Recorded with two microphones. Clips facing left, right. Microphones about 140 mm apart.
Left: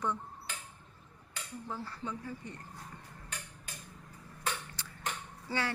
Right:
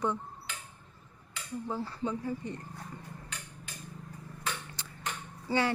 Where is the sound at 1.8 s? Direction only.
25° right (ahead or behind).